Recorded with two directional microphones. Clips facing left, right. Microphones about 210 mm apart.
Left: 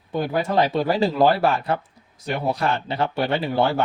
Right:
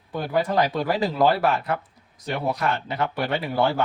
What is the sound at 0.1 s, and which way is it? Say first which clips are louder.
Speech: left 1 dB; 25° left (ahead or behind).